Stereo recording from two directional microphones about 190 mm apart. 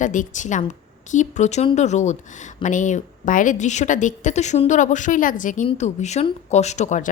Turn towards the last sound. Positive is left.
turn(degrees=40)  # may be behind; listen again after turning